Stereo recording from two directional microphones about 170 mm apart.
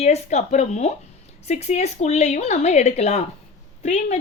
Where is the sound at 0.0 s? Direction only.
40° left (ahead or behind).